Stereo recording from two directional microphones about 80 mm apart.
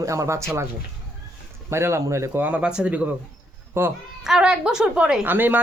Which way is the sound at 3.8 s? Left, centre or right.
Right.